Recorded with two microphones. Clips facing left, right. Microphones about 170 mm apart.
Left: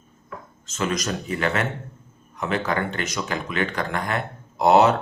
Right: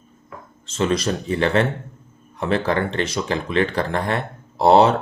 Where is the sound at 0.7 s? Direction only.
30° right (ahead or behind).